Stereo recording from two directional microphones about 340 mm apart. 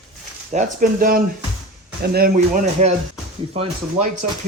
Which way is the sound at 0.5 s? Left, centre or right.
Right.